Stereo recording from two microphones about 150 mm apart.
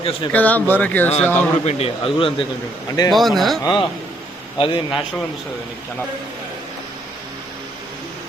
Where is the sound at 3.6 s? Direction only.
30° left (ahead or behind).